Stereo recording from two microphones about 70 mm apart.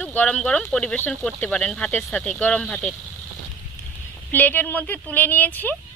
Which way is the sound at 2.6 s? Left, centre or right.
Centre.